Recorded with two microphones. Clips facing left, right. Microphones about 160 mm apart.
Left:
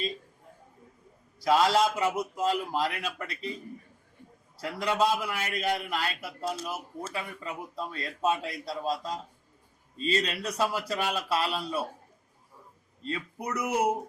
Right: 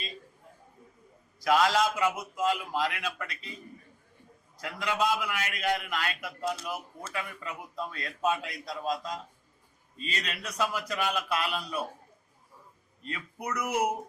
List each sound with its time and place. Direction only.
1.5 s a man's voice: 30° left (ahead or behind)
4.6 s a man's voice: 35° left (ahead or behind)
13.0 s a man's voice: 30° left (ahead or behind)